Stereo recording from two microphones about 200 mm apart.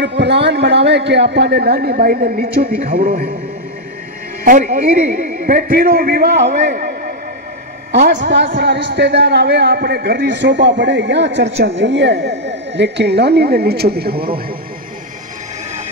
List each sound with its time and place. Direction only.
0.2 s a man's voice: 60° right (ahead or behind)
4.5 s a man's voice: 40° right (ahead or behind)
7.9 s a man's voice: 60° right (ahead or behind)